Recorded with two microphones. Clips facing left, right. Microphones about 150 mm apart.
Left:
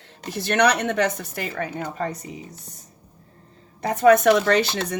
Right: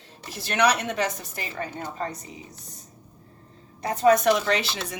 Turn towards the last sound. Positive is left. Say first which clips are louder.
# left 6 dB
turn(degrees=55)  # may be behind; listen again after turning